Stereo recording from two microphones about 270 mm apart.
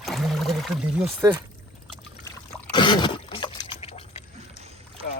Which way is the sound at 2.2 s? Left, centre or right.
Centre.